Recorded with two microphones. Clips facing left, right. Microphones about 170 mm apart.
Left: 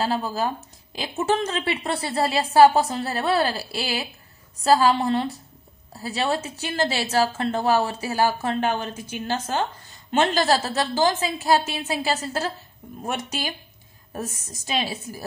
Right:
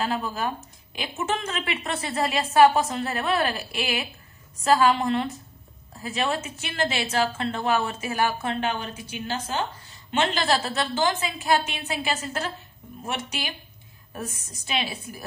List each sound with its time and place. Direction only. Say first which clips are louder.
0.0 s a woman's voice: left 3 dB; 35° left (ahead or behind)